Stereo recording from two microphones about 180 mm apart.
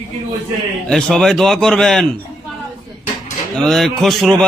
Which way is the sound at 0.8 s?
5° left (ahead or behind).